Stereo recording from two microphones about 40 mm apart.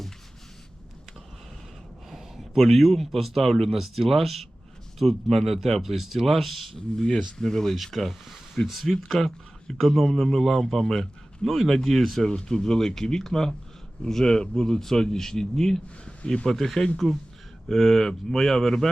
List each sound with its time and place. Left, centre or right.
2.0 s speech: centre
6.7 s speech: centre
16.0 s speech: left
16.5 s speech: centre